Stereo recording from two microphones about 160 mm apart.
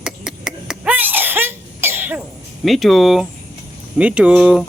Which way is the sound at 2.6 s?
Centre (ahead or behind).